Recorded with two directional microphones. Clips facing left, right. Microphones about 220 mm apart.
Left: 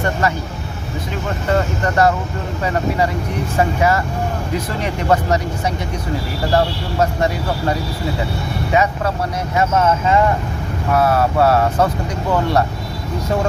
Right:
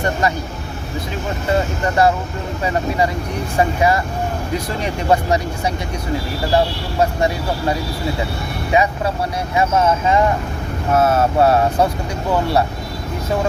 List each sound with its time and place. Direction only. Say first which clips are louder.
1.5 s speech: even; 10° right (ahead or behind)
3.6 s speech: even; 15° right (ahead or behind)
8.7 s speech: right 1 dB; 10° right (ahead or behind)
12.3 s speech: even; 10° right (ahead or behind)